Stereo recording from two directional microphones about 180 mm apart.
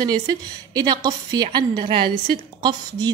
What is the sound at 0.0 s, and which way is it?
Speech, 25° right (ahead or behind).